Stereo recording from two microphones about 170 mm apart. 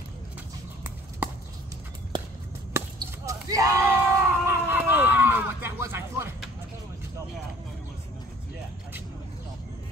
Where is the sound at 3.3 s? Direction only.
20° right (ahead or behind).